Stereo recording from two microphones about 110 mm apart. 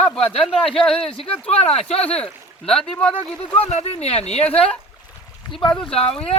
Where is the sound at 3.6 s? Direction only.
70° left (ahead or behind).